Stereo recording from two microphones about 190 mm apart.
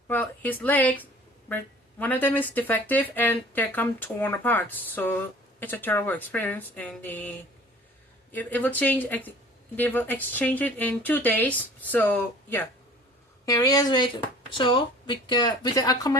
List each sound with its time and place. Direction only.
0.1 s speech: 10° left (ahead or behind)